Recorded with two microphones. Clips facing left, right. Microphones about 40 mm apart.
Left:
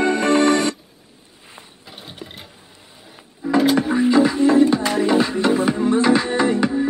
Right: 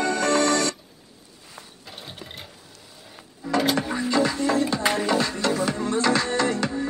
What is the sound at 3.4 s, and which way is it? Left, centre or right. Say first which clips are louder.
Music: left 6 dB; centre.